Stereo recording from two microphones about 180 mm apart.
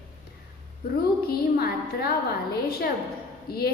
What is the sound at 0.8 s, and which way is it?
A woman's voice, 55° left (ahead or behind).